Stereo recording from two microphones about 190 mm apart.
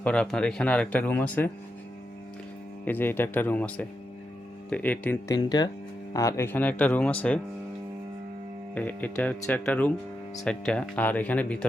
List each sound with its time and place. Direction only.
0.0 s speech: 5° left (ahead or behind)
2.8 s speech: 10° left (ahead or behind)
5.3 s speech: 20° left (ahead or behind)
8.7 s speech: 10° left (ahead or behind)